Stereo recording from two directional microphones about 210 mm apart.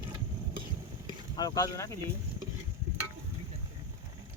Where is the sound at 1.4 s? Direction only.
15° left (ahead or behind).